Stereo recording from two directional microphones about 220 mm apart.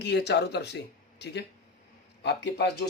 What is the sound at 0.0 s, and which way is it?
Speech, 50° left (ahead or behind).